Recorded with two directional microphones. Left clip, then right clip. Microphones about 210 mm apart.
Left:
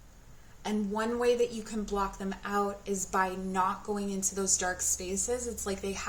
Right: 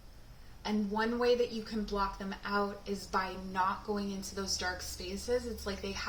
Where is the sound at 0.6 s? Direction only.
35° left (ahead or behind).